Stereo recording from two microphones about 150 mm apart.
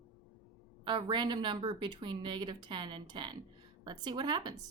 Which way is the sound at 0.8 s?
30° right (ahead or behind).